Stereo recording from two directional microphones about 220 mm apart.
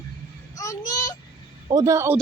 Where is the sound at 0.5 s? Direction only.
15° left (ahead or behind).